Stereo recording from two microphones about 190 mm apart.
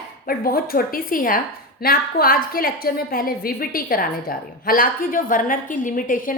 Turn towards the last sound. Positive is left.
turn(degrees=45)  # may be behind; listen again after turning